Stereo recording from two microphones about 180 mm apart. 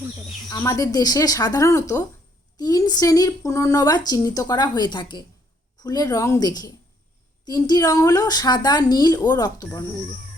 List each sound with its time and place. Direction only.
0.4 s a woman's voice: 20° left (ahead or behind)